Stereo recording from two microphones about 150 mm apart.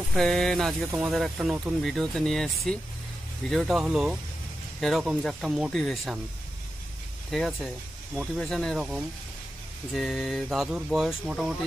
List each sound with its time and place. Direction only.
0.1 s speech: centre (ahead or behind)
7.2 s speech: centre (ahead or behind)